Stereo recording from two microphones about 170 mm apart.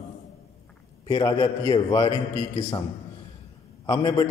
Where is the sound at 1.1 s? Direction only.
25° left (ahead or behind).